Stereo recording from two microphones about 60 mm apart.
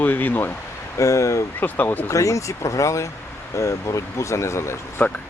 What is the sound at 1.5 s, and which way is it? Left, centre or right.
Speech, left.